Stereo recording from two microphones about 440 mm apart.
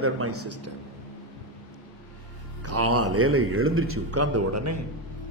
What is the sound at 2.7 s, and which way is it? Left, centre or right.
A man's voice, right.